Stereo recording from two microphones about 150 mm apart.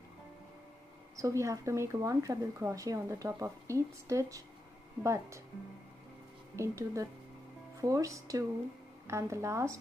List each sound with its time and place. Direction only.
1.1 s speech: 20° right (ahead or behind)
6.5 s speech: 20° right (ahead or behind)